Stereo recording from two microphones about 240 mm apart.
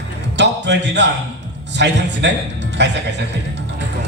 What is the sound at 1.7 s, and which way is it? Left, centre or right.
Speech, right.